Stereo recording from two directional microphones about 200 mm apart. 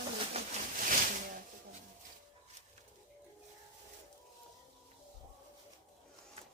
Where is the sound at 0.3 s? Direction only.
40° right (ahead or behind).